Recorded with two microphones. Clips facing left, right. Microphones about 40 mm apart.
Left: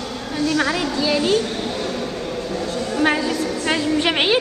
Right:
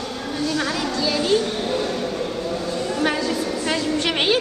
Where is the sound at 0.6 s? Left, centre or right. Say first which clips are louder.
Left 3 dB; centre.